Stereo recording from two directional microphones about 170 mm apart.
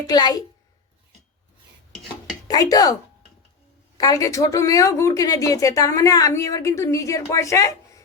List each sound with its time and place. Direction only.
0.1 s a woman's voice: 25° left (ahead or behind)
2.5 s a woman's voice: 20° left (ahead or behind)
3.9 s a woman's voice: 20° left (ahead or behind)